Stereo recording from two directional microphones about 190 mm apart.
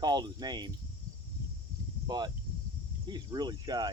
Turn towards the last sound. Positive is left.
turn(degrees=-20)  # may be behind; listen again after turning